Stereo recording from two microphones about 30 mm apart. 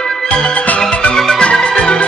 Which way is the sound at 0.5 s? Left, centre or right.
Left.